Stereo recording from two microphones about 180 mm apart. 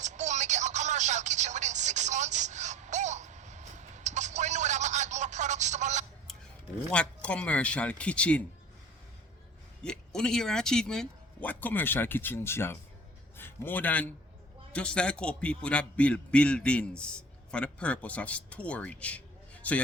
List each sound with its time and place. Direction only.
0.0 s telephone: 40° right (ahead or behind)
6.9 s a man's voice: 5° left (ahead or behind)
9.8 s a man's voice: 5° left (ahead or behind)